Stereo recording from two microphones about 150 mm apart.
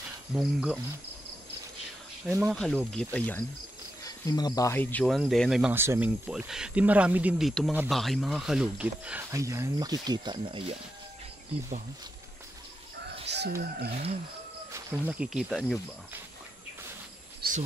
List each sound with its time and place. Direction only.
0.3 s speech: 5° right (ahead or behind)
2.4 s speech: 5° left (ahead or behind)
4.0 s speech: 25° left (ahead or behind)
5.0 s speech: centre (ahead or behind)
9.3 s speech: 20° right (ahead or behind)
13.5 s speech: 75° right (ahead or behind)
14.7 s speech: 15° right (ahead or behind)
17.4 s a sound: 90° right